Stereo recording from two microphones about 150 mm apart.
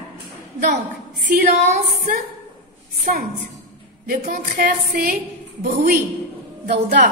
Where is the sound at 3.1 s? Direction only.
65° right (ahead or behind).